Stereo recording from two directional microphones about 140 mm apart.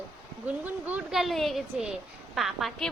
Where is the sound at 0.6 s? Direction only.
10° right (ahead or behind).